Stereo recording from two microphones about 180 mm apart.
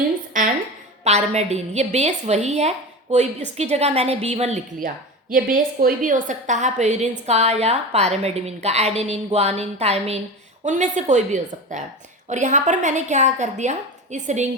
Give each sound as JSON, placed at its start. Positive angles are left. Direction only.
{"t": 0.4, "sound": "a sound", "side_deg": -45}
{"t": 1.0, "sound": "a woman's voice", "side_deg": -35}
{"t": 5.3, "sound": "a woman's voice", "side_deg": -50}